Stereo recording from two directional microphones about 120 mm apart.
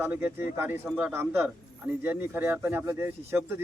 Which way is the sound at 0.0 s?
15° right (ahead or behind).